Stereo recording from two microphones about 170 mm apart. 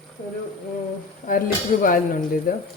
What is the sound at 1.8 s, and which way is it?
Speech, 55° left (ahead or behind).